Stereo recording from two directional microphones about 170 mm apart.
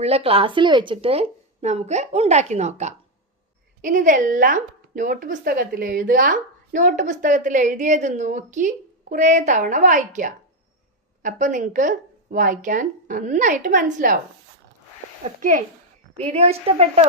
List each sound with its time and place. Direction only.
0.0 s a woman's voice: 35° right (ahead or behind)
15.4 s a woman's voice: 50° right (ahead or behind)
16.1 s speech: 40° right (ahead or behind)